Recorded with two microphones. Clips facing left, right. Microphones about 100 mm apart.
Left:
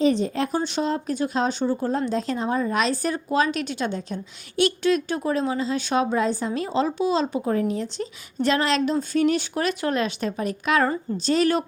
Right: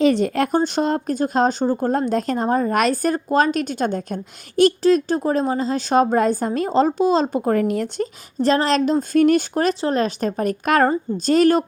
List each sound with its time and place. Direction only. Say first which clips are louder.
0.0 s a woman's voice: right 4 dB; 65° right (ahead or behind)
8.0 s a woman's voice: right 3 dB; 35° right (ahead or behind)